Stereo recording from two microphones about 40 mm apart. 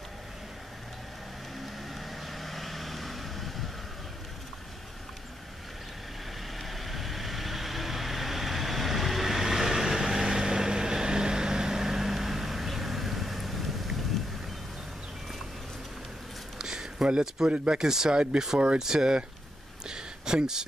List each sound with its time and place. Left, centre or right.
2.0 s vehicle: centre
6.6 s vehicle: centre
16.5 s a sound: centre
17.5 s speech: centre